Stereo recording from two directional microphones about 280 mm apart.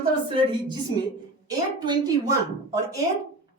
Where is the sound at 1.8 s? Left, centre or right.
Centre.